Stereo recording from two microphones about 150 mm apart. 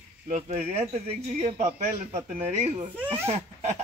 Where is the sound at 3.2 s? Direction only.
45° right (ahead or behind).